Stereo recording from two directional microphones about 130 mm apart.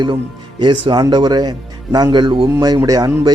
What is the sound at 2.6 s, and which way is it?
Speech, 30° right (ahead or behind).